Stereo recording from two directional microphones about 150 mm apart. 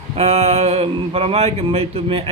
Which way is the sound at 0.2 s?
45° right (ahead or behind).